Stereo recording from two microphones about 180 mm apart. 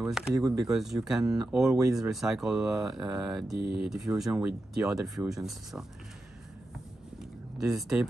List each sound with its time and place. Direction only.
0.0 s speech: 5° right (ahead or behind)
0.3 s speech: 20° right (ahead or behind)
0.7 s speech: centre (ahead or behind)
7.7 s speech: 5° right (ahead or behind)